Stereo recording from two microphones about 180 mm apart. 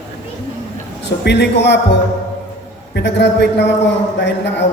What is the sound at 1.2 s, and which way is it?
A man's voice, 70° left (ahead or behind).